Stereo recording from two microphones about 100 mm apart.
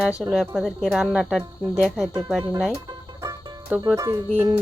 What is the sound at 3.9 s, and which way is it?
Speech, 30° right (ahead or behind).